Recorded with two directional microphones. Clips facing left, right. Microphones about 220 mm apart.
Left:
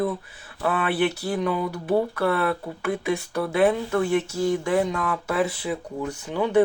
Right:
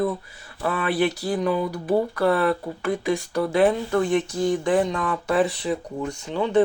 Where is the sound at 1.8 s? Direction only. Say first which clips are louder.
Right 2 dB; centre (ahead or behind).